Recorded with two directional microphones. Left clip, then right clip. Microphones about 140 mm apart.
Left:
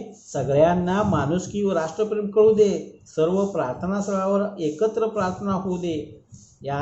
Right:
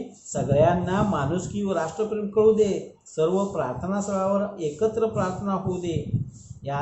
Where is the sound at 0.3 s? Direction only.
45° left (ahead or behind).